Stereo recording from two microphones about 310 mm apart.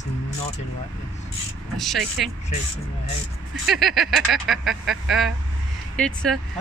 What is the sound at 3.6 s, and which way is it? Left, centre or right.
Speech, centre.